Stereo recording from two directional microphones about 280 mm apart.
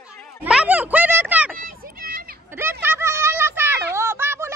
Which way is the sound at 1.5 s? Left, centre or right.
Right.